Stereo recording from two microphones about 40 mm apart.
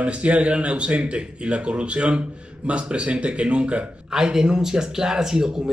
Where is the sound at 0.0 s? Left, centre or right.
Right.